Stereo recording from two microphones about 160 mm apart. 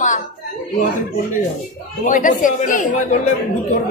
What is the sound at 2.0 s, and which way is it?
A woman's voice, 55° left (ahead or behind).